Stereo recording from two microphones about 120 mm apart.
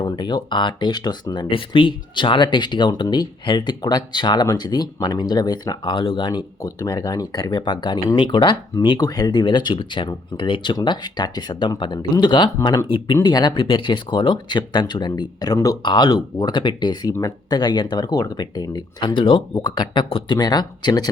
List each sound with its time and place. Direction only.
0.0 s speech: 40° left (ahead or behind)
6.6 s speech: 30° left (ahead or behind)